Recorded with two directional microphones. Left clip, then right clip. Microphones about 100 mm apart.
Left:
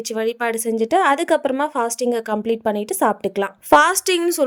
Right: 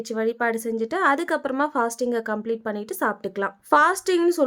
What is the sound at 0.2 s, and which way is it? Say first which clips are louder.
A woman's voice: left 2 dB; 35° left (ahead or behind).